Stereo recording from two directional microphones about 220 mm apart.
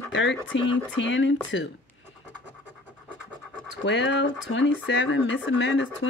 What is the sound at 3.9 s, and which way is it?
Speech, 55° left (ahead or behind).